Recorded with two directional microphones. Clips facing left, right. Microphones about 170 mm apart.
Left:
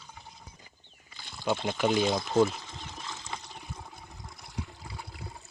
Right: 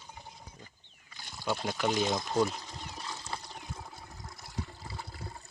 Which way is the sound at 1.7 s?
10° left (ahead or behind).